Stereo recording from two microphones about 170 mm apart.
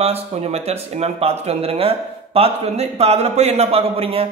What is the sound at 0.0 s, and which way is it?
A man's voice, 40° right (ahead or behind).